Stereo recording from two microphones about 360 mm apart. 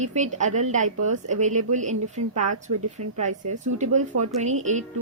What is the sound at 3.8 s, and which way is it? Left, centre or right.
Speech, centre.